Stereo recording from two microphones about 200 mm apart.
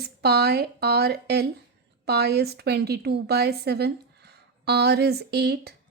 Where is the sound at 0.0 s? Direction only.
55° right (ahead or behind).